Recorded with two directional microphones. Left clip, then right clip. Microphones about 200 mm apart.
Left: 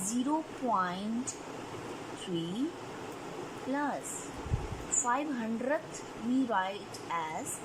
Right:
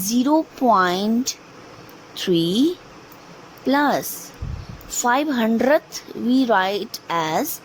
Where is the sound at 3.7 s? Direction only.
55° right (ahead or behind).